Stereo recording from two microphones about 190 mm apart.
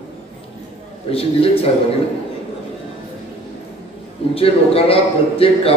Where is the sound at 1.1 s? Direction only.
30° left (ahead or behind).